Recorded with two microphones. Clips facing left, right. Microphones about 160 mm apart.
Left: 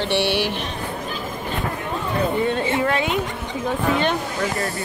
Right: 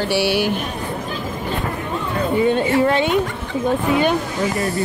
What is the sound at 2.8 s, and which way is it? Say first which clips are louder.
Speech: right 5 dB; 30° right (ahead or behind).